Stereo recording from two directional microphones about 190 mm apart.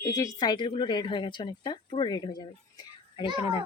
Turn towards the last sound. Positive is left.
turn(degrees=25)  # may be behind; listen again after turning